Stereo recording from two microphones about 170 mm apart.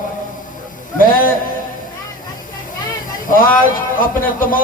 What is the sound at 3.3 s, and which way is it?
Speech, 55° left (ahead or behind).